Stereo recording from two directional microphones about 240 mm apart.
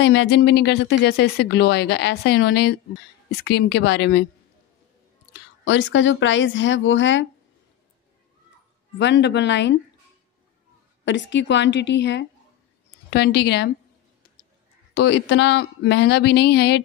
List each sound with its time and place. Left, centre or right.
0.0 s speech: left
5.7 s speech: left
8.9 s speech: left
11.1 s speech: left
15.0 s speech: left